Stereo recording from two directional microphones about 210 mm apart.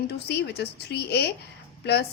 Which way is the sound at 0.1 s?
50° left (ahead or behind).